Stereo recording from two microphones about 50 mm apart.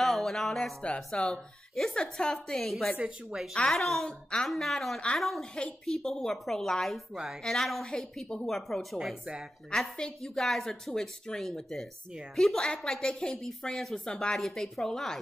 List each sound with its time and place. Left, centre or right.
0.0 s music: centre
0.8 s a woman's voice: left; by 3.0 s centre
3.3 s speech: centre
3.7 s a woman's voice: centre
5.4 s speech: centre
5.9 s a woman's voice: centre
9.2 s speech: centre
9.7 s a woman's voice: centre